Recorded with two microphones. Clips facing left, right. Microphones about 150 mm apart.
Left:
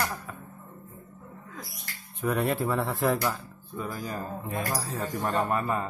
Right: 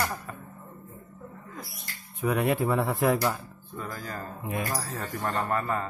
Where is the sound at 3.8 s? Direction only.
10° left (ahead or behind).